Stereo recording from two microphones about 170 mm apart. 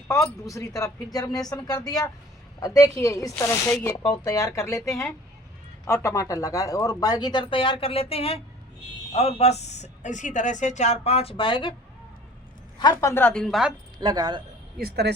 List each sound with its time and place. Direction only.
0.1 s a woman's voice: 15° left (ahead or behind)
12.8 s a woman's voice: 20° left (ahead or behind); by 13.7 s centre (ahead or behind)
14.0 s speech: 25° right (ahead or behind)
14.8 s speech: 70° right (ahead or behind)